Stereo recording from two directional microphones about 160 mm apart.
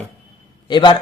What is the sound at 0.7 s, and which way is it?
Speech, 30° left (ahead or behind).